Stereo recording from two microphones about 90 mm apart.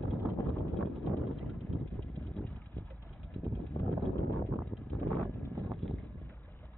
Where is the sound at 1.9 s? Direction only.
60° right (ahead or behind).